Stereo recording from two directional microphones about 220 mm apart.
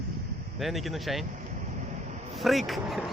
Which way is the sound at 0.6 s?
Centre (ahead or behind).